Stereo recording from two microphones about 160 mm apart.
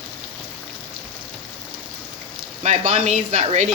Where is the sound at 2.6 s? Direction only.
45° right (ahead or behind).